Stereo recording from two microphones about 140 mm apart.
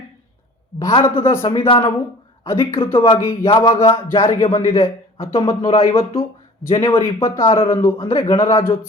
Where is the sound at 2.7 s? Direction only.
40° left (ahead or behind).